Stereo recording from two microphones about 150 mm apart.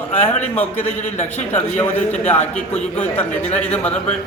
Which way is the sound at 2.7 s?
10° left (ahead or behind).